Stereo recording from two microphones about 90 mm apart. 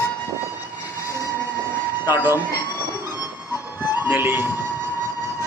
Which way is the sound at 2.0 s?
30° right (ahead or behind).